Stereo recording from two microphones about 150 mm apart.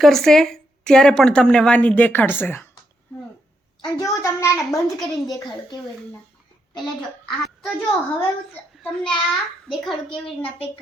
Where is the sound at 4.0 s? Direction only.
20° left (ahead or behind).